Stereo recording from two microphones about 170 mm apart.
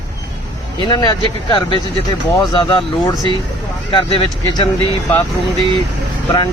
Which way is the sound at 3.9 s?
30° left (ahead or behind).